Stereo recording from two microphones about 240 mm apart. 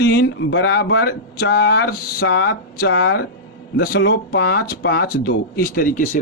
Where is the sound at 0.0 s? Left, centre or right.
Left.